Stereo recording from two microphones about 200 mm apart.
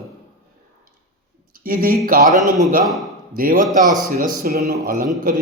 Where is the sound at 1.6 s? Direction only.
45° right (ahead or behind).